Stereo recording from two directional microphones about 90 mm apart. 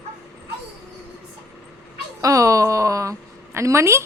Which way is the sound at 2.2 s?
40° right (ahead or behind).